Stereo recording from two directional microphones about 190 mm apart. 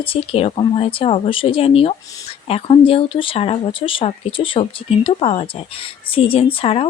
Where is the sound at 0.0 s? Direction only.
30° left (ahead or behind).